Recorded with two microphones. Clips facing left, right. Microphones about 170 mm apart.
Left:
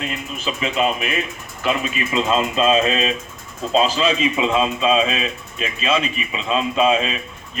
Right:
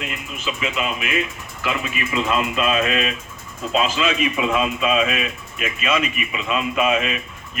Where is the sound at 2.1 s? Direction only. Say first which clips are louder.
Left 3 dB; 25° left (ahead or behind).